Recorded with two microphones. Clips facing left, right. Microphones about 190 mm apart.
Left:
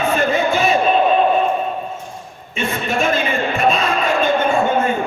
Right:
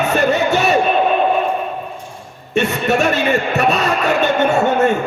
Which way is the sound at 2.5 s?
70° right (ahead or behind).